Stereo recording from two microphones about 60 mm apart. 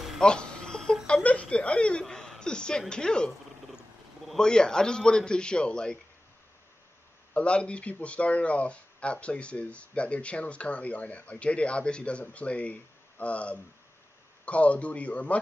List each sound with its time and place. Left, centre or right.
0.2 s a sound: centre
2.9 s a man's voice: centre
4.4 s a man's voice: centre
7.3 s speech: centre